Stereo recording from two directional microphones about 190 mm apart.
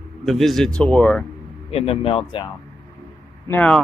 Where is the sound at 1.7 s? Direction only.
30° left (ahead or behind).